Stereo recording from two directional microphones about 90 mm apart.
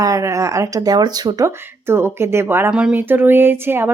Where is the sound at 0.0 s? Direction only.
35° right (ahead or behind).